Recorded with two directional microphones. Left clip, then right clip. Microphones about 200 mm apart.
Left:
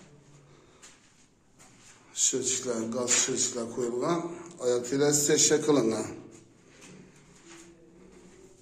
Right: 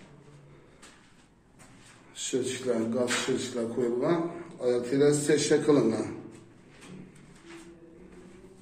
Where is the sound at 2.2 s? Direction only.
15° left (ahead or behind).